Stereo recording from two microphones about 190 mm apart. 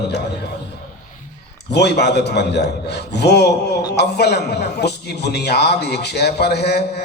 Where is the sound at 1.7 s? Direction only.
60° left (ahead or behind).